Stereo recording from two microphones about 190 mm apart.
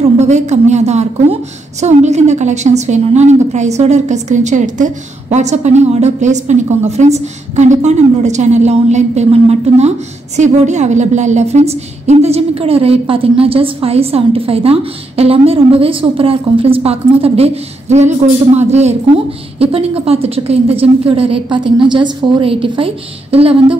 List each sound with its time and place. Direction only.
0.2 s a woman's voice: 35° right (ahead or behind)